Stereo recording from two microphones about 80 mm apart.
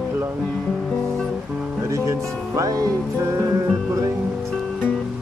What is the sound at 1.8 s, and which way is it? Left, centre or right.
Speech, right.